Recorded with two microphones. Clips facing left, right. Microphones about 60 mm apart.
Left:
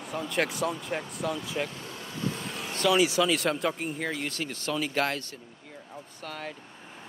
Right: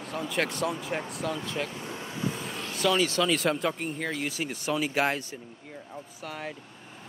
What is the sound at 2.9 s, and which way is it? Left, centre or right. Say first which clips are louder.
Speech: left 3 dB; centre.